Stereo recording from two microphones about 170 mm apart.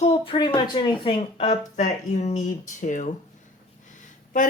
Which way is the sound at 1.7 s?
45° left (ahead or behind).